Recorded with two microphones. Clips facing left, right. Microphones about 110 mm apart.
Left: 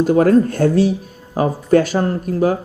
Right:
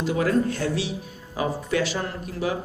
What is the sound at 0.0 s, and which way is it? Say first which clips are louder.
Speech: left 10 dB; 45° left (ahead or behind).